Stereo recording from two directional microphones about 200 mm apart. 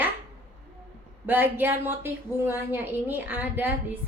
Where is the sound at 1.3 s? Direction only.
10° right (ahead or behind).